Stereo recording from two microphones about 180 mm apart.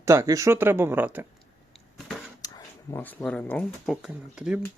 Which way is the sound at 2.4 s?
20° left (ahead or behind).